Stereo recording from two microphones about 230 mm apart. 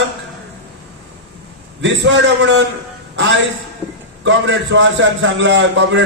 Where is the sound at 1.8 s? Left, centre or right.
Right.